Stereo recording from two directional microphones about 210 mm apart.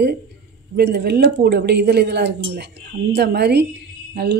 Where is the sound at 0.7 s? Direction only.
50° right (ahead or behind).